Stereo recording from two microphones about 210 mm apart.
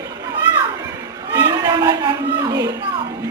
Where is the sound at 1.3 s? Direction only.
20° right (ahead or behind).